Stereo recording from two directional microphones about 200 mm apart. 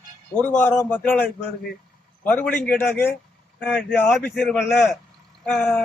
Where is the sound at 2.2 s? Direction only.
10° left (ahead or behind).